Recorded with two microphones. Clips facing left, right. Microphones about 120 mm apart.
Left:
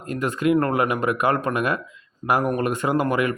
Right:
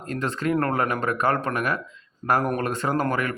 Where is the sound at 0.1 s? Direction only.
10° left (ahead or behind).